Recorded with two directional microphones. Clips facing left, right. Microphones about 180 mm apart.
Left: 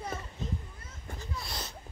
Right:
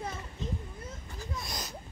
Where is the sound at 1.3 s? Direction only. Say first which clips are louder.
Right 1 dB; 15° right (ahead or behind).